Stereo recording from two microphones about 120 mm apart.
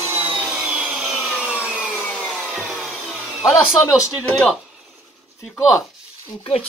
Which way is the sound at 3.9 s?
5° right (ahead or behind).